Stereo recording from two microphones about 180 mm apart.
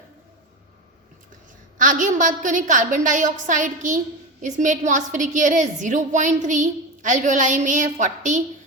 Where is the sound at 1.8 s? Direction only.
45° right (ahead or behind).